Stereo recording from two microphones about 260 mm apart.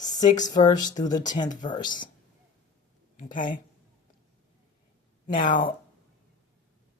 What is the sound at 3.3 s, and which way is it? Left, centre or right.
Speech, left.